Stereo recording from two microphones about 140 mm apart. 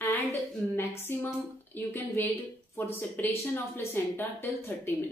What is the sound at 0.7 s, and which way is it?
Speech, 15° left (ahead or behind).